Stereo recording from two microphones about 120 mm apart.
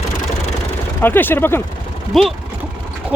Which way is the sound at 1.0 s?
15° left (ahead or behind).